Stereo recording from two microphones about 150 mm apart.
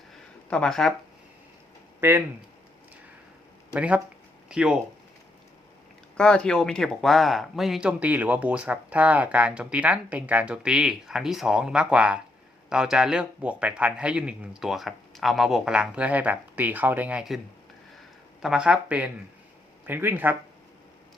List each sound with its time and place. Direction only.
0.5 s speech: 5° left (ahead or behind)
2.0 s speech: 15° right (ahead or behind)
3.8 s speech: 10° right (ahead or behind)
6.1 s speech: 5° left (ahead or behind)
18.4 s speech: 5° right (ahead or behind)